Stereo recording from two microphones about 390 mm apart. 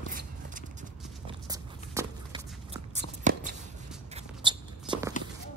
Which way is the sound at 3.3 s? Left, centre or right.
Centre.